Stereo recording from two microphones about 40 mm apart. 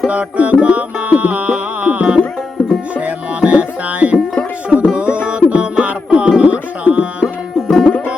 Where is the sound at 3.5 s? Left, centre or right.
Right.